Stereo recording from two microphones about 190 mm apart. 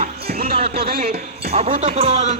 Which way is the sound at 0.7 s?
55° right (ahead or behind).